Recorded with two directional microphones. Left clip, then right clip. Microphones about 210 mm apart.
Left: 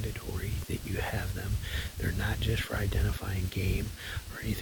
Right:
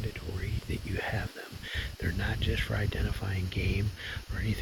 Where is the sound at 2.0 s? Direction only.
5° left (ahead or behind).